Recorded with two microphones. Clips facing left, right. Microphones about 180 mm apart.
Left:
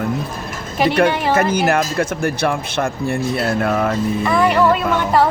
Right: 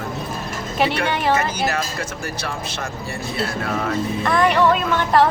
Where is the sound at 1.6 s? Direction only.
55° left (ahead or behind).